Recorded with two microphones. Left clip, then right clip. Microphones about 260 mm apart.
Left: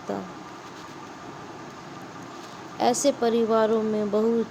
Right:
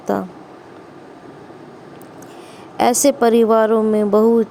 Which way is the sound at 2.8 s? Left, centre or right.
Right.